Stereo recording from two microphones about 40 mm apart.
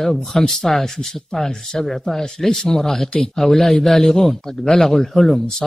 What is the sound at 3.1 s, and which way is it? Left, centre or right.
A man's voice, centre.